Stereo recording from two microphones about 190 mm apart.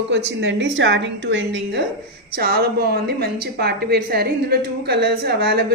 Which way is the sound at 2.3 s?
55° right (ahead or behind).